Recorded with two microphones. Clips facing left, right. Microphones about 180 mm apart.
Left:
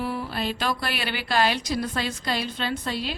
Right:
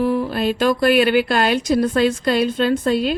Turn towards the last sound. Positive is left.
turn(degrees=-50)  # may be behind; listen again after turning